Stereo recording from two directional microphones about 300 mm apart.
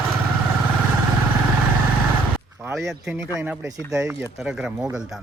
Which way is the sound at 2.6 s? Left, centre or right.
Centre.